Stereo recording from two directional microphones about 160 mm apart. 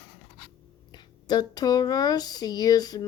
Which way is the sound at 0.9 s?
25° left (ahead or behind).